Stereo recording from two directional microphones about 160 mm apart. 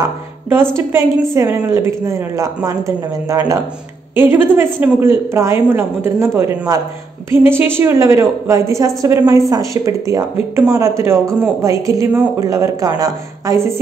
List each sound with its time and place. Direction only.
0.0 s a woman's voice: 15° right (ahead or behind)
4.1 s a woman's voice: 15° right (ahead or behind)